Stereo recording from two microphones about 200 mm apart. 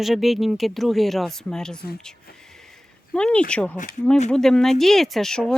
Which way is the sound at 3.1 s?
5° left (ahead or behind).